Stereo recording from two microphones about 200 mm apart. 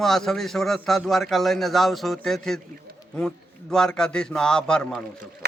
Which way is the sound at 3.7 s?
5° left (ahead or behind).